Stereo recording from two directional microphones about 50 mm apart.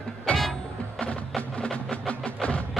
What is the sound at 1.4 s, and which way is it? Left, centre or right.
Music, left.